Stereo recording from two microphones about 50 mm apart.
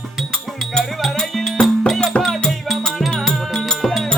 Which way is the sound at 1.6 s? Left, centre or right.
Centre.